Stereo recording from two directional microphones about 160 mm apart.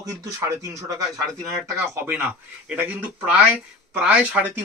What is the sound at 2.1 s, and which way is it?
Speech, 10° right (ahead or behind).